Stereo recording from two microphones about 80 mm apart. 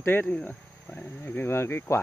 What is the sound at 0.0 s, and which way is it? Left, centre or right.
Speech, left.